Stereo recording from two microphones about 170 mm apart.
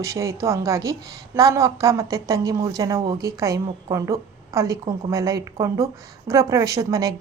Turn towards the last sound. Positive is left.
turn(degrees=-20)  # may be behind; listen again after turning